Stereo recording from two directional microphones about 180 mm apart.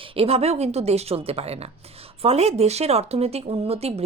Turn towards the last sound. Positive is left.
turn(degrees=-35)  # may be behind; listen again after turning